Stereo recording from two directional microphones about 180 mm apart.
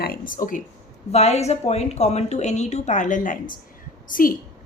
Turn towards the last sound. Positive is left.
turn(degrees=50)  # may be behind; listen again after turning